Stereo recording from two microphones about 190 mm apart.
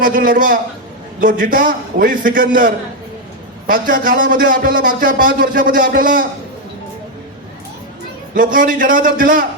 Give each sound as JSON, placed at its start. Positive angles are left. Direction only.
{"t": 0.0, "sound": "speech", "side_deg": -45}
{"t": 8.4, "sound": "speech", "side_deg": -45}